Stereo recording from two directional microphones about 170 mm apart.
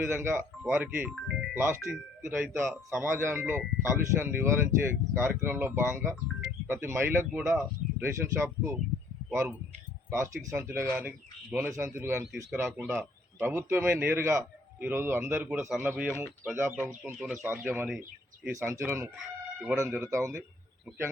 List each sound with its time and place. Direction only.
0.0 s a man's voice: 15° right (ahead or behind)
10.1 s a man's voice: 15° right (ahead or behind)
19.1 s chicken: centre (ahead or behind)
19.7 s a man's voice: 15° right (ahead or behind)